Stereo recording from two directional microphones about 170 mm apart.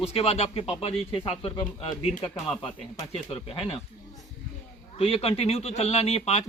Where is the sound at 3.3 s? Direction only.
35° left (ahead or behind).